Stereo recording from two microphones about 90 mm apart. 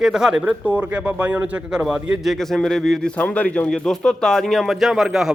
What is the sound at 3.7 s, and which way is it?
Speech, 5° left (ahead or behind).